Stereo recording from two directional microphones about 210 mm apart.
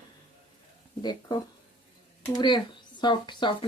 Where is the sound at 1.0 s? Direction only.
20° left (ahead or behind).